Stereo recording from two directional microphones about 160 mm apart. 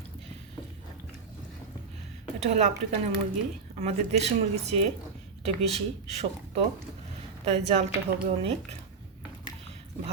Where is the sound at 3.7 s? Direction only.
45° right (ahead or behind).